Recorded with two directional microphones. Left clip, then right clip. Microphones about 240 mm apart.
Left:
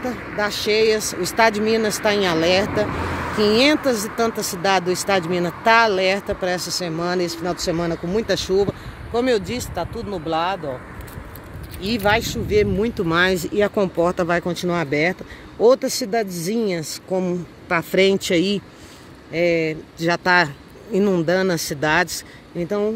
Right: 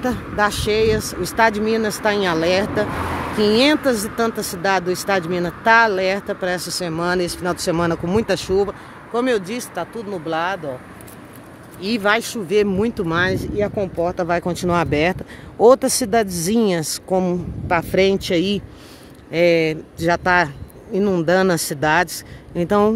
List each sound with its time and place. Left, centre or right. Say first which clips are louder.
0.4 s speech: right 1 dB; centre
11.8 s speech: right 1 dB; centre
14.2 s speech: right 1 dB; centre
19.3 s speech: right 4 dB; centre
20.1 s speech: right 1 dB; centre
22.6 s speech: right 6 dB; right